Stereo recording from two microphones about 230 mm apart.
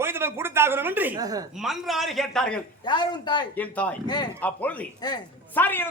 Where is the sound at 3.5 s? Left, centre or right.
Centre.